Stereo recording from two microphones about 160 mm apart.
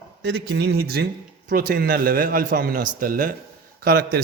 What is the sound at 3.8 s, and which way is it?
Speech, 70° right (ahead or behind).